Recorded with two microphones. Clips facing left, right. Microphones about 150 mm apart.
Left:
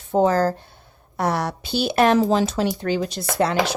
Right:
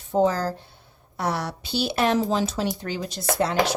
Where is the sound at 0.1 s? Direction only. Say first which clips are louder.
Left 4 dB; 55° left (ahead or behind).